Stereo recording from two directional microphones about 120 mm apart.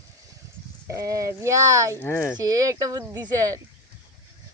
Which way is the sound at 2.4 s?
30° right (ahead or behind).